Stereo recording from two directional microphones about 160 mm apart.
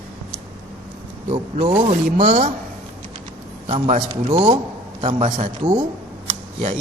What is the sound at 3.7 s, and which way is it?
A man's voice, 45° right (ahead or behind).